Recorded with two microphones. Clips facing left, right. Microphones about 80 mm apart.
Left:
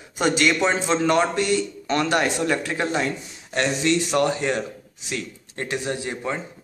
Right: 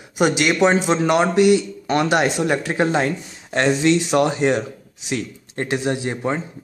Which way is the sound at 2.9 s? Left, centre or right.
Right.